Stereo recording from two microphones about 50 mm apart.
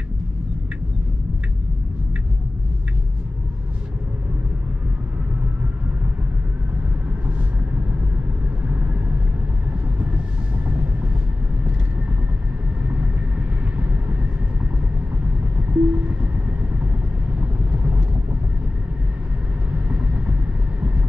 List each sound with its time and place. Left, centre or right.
15.7 s vehicle: right
19.9 s vehicle: right